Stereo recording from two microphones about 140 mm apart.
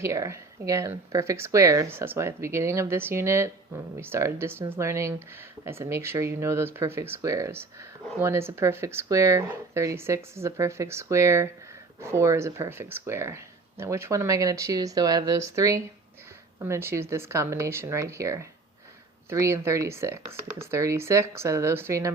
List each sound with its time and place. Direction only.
0.0 s speech: 20° right (ahead or behind)